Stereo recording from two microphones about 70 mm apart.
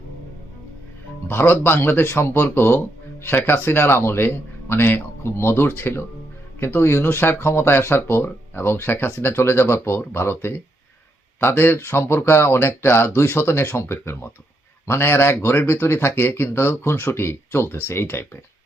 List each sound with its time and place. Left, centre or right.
1.3 s speech: left